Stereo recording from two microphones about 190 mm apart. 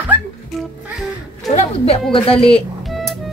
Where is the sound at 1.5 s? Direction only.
30° left (ahead or behind).